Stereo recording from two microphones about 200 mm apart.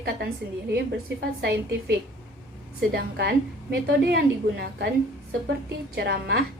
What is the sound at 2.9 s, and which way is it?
A woman's voice, 55° right (ahead or behind).